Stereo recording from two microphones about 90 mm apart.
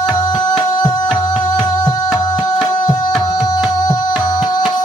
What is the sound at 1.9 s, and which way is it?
Music, 45° left (ahead or behind).